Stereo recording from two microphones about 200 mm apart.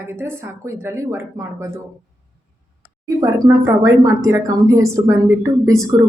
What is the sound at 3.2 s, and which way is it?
Speech, 20° right (ahead or behind).